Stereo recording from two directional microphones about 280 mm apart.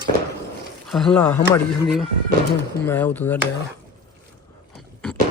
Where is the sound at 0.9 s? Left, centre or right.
Centre.